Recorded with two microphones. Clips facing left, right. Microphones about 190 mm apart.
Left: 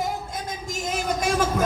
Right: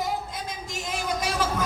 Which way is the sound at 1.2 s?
50° left (ahead or behind).